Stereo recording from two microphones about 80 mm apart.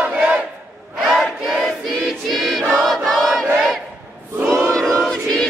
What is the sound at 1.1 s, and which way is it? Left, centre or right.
Choir, centre.